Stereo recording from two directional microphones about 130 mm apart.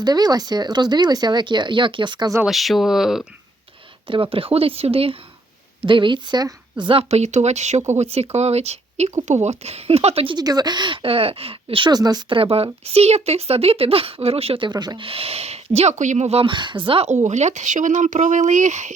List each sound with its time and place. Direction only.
0.0 s speech: 30° right (ahead or behind)
2.4 s speech: centre (ahead or behind)
4.0 s speech: 40° right (ahead or behind)
7.1 s speech: 60° right (ahead or behind)
10.3 s speech: 30° right (ahead or behind)
12.4 s speech: 45° right (ahead or behind)
14.7 s speech: 35° right (ahead or behind)
17.1 s speech: 65° right (ahead or behind)